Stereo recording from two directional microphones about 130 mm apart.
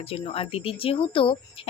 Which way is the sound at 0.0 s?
45° left (ahead or behind).